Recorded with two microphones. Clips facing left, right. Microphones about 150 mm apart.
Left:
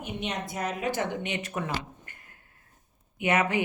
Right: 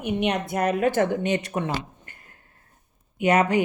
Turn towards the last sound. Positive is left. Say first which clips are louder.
# right 6 dB
turn(degrees=-35)  # may be behind; listen again after turning